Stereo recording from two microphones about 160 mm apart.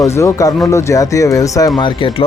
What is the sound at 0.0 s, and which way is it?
Speech, 20° left (ahead or behind).